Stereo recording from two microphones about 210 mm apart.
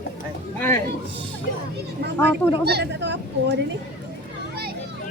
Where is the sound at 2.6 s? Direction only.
50° right (ahead or behind).